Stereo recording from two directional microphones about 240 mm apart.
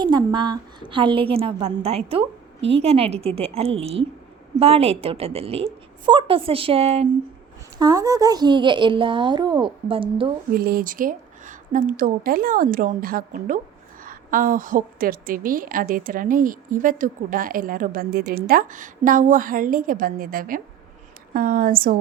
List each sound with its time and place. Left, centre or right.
0.0 s a woman's voice: centre
10.5 s a woman's voice: right